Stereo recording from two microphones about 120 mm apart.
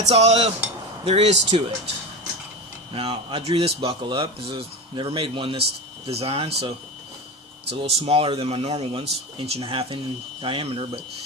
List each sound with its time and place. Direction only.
0.1 s speech: 65° right (ahead or behind)
1.5 s speech: 45° right (ahead or behind)
2.9 s speech: 50° right (ahead or behind)